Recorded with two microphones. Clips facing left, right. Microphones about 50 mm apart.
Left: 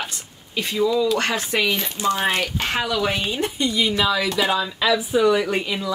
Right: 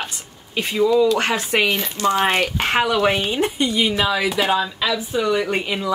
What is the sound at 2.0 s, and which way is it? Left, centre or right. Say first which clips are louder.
Speech: right 2 dB; centre.